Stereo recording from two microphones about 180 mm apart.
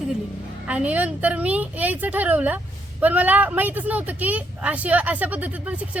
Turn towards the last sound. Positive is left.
turn(degrees=-10)  # may be behind; listen again after turning